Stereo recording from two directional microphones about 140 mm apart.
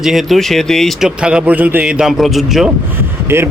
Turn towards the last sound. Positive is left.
turn(degrees=-15)  # may be behind; listen again after turning